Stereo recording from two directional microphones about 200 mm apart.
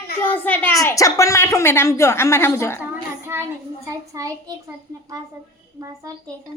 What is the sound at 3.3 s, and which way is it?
Child singing, 10° right (ahead or behind).